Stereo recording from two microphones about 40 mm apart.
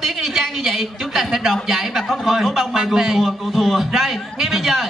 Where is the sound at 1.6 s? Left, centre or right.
Centre.